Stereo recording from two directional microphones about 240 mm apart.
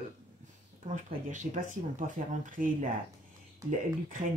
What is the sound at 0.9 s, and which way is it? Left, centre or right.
Speech, right.